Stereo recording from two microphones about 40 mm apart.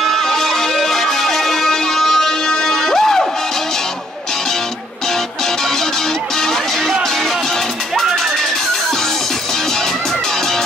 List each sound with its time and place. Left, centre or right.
0.0 s music: centre
6.4 s music: centre